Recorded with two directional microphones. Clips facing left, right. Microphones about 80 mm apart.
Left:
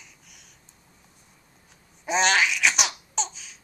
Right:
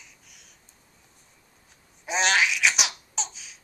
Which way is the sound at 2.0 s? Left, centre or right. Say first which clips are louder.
Left 2 dB; centre.